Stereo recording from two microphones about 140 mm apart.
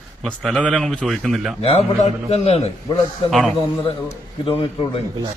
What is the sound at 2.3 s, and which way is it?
Speech, 50° left (ahead or behind).